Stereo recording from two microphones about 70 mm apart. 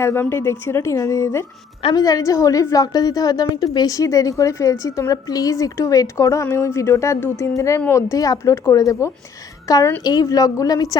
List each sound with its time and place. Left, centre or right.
0.0 s speech: left
1.9 s a woman's voice: left
6.5 s a woman's voice: left
10.0 s a woman's voice: left